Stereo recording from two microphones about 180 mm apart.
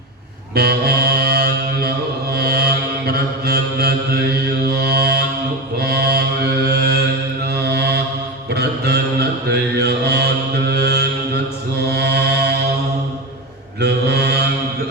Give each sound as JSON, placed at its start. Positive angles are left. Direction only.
{"t": 0.5, "sound": "mantra", "side_deg": -60}
{"t": 9.5, "sound": "mantra", "side_deg": -65}
{"t": 13.7, "sound": "mantra", "side_deg": -65}